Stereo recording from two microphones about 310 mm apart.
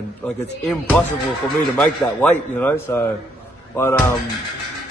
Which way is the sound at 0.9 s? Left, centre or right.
Centre.